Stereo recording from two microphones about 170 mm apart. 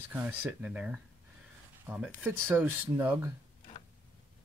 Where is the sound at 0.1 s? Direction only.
10° right (ahead or behind).